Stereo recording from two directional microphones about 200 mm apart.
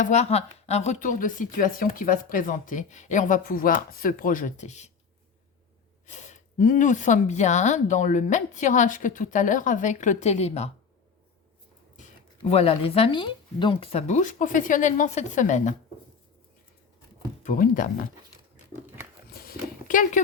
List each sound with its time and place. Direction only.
0.0 s speech: 35° left (ahead or behind)
6.1 s speech: 35° left (ahead or behind)
12.4 s speech: 30° left (ahead or behind)
17.4 s speech: 40° left (ahead or behind)
19.3 s horse: 50° left (ahead or behind)